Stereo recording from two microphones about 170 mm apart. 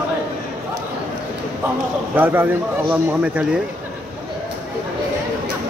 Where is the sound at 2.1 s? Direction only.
10° right (ahead or behind).